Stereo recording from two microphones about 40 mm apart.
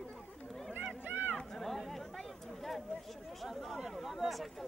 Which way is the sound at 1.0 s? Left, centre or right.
Right.